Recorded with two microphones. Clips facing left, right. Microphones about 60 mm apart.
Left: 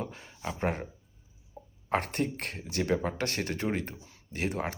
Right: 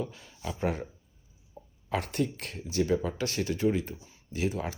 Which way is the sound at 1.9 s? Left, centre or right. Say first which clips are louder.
Left 1 dB; left.